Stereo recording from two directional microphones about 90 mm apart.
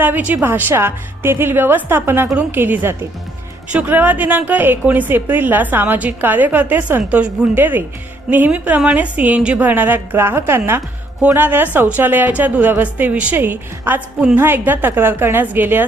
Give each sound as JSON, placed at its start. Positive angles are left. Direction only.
{"t": 0.0, "sound": "a woman's voice", "side_deg": -20}